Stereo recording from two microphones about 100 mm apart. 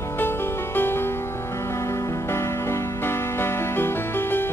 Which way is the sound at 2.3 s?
25° left (ahead or behind).